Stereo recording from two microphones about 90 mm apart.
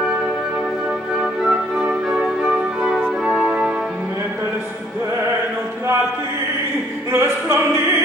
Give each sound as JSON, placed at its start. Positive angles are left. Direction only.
{"t": 1.4, "sound": "music", "side_deg": -5}
{"t": 7.1, "sound": "music", "side_deg": -30}